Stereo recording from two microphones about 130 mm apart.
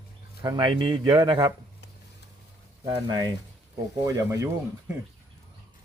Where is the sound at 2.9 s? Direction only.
35° right (ahead or behind).